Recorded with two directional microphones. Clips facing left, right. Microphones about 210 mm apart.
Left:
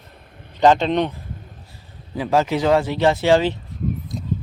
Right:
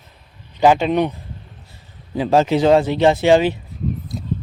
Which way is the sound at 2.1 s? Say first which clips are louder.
Right 4 dB; 25° right (ahead or behind).